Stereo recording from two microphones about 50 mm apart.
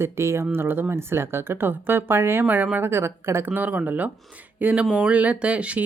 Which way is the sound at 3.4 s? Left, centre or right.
Right.